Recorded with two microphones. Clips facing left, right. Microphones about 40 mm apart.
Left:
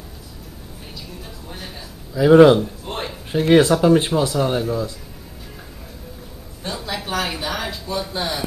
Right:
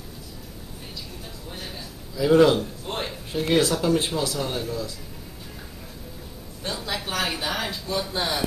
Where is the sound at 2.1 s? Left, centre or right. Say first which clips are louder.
Left 7 dB; left.